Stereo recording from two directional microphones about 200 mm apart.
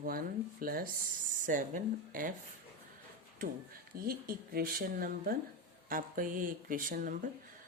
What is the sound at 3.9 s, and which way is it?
Speech, 50° right (ahead or behind).